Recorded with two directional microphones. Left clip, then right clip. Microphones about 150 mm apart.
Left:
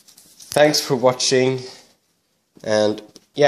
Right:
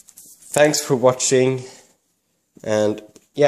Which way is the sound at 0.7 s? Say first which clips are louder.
Right 1 dB; 25° right (ahead or behind).